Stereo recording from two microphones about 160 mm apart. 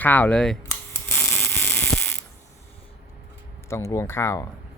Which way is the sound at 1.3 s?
10° left (ahead or behind).